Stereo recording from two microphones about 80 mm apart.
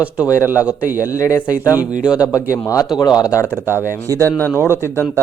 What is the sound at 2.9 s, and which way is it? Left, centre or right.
Speech, left.